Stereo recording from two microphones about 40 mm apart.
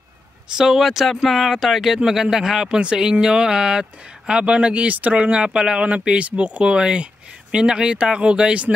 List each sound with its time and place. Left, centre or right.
0.6 s speech: centre; by 5.1 s right
5.1 s speech: right
6.0 s speech: right